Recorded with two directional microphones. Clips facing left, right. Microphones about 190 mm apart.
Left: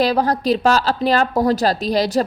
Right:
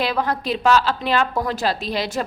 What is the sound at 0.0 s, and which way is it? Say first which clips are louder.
Speech: left 5 dB; 40° left (ahead or behind).